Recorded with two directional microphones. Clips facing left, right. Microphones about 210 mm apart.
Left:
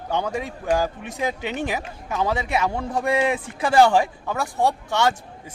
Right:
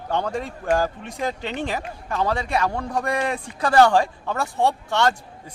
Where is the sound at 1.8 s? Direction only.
5° left (ahead or behind).